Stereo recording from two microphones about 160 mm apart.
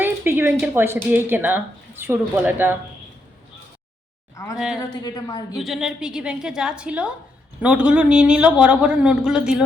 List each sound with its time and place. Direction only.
0.0 s a woman's voice: 15° right (ahead or behind)
4.5 s a woman's voice: 5° right (ahead or behind)
4.8 s a woman's voice: 25° left (ahead or behind)
5.5 s a woman's voice: centre (ahead or behind)